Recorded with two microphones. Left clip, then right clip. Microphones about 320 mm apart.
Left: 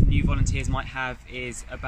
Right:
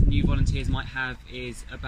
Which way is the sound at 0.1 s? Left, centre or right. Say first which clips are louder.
Left 1 dB; centre.